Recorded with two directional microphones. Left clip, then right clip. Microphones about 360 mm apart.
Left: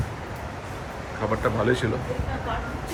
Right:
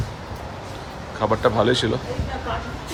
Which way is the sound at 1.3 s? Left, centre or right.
Centre.